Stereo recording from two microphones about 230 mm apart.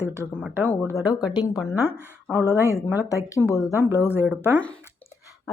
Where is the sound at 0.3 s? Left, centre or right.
Centre.